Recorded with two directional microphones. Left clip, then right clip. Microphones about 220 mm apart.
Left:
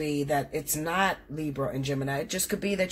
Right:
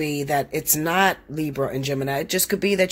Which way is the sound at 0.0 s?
50° right (ahead or behind).